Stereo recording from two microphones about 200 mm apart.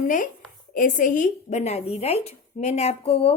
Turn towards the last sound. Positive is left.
turn(degrees=30)  # may be behind; listen again after turning